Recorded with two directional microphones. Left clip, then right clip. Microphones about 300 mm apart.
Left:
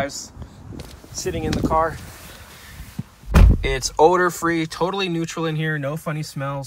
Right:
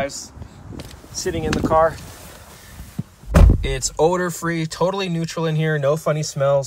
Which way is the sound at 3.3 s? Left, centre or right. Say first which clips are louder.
Right 1 dB; centre.